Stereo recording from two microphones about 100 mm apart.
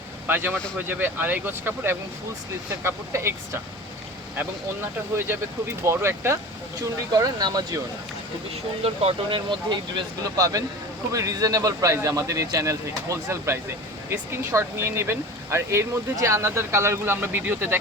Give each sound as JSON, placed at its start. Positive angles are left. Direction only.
{"t": 0.3, "sound": "speech", "side_deg": -20}
{"t": 5.8, "sound": "speech", "side_deg": -25}
{"t": 7.1, "sound": "speech", "side_deg": -40}
{"t": 8.8, "sound": "speech", "side_deg": -90}
{"t": 9.6, "sound": "speech", "side_deg": -50}
{"t": 10.3, "sound": "speech", "side_deg": -35}